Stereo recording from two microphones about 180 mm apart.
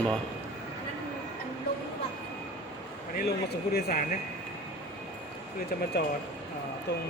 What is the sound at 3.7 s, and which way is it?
Speech, 50° left (ahead or behind).